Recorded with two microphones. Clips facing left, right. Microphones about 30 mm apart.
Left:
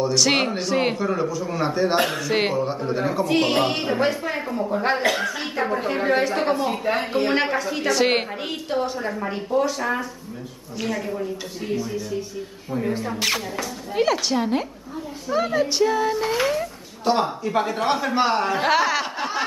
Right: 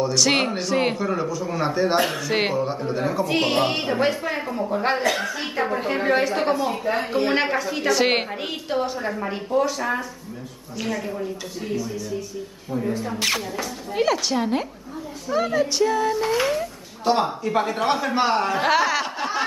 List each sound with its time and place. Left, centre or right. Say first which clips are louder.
0.0 s speech: even; centre
12.7 s speech: even; left
13.0 s speech: even; centre